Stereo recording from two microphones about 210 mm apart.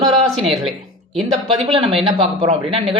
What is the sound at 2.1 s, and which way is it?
Speech, 30° right (ahead or behind).